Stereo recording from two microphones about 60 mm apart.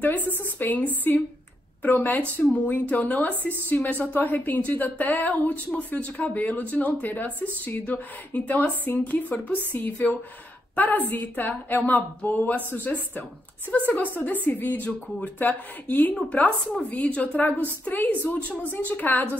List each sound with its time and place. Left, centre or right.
0.0 s a woman's voice: left